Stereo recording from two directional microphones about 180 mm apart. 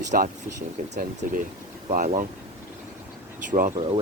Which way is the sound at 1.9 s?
45° right (ahead or behind).